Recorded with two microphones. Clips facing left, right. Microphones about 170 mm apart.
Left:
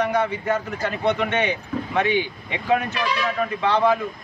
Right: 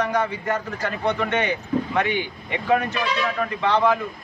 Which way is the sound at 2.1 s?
50° right (ahead or behind).